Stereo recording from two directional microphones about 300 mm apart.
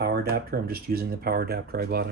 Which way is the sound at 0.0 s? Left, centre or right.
Right.